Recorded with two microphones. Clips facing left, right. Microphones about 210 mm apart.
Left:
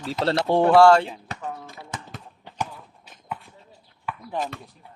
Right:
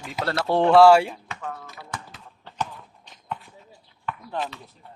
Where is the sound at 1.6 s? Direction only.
25° left (ahead or behind).